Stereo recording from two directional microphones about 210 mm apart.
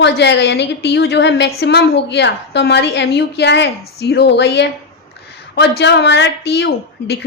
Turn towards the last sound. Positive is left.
turn(degrees=50)  # may be behind; listen again after turning